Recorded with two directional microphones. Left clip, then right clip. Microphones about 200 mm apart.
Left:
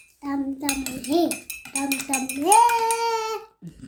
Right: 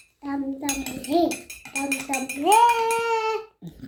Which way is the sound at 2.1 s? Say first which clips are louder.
Left 1 dB; 25° left (ahead or behind).